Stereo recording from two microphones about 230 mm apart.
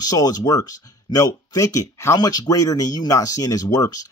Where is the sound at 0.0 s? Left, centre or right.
Centre.